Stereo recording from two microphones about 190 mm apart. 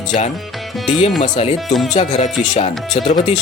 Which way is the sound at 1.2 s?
35° left (ahead or behind).